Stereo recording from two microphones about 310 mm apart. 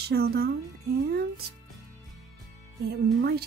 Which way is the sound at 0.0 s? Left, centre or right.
Right.